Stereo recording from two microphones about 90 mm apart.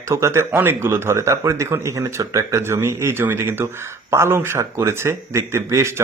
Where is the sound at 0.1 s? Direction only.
30° right (ahead or behind).